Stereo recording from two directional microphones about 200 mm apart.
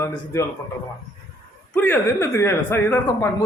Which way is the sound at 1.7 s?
10° left (ahead or behind).